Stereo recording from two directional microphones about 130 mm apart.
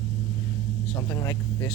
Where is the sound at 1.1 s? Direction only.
15° left (ahead or behind).